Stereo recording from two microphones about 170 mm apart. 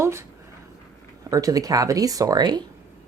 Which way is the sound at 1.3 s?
20° right (ahead or behind).